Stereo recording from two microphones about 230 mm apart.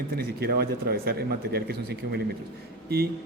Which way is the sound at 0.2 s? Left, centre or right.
Right.